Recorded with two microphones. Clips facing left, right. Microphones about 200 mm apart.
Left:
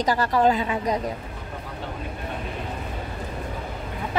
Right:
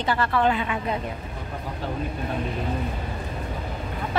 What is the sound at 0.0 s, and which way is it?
Speech, 40° left (ahead or behind).